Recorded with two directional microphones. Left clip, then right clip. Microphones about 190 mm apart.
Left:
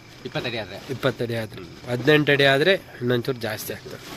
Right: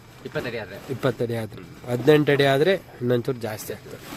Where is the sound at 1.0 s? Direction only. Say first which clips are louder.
Even; 15° right (ahead or behind).